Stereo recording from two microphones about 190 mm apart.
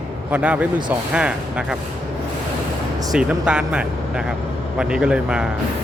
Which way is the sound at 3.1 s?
5° right (ahead or behind).